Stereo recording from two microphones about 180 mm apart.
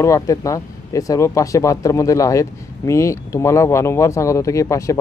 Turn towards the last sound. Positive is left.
turn(degrees=15)  # may be behind; listen again after turning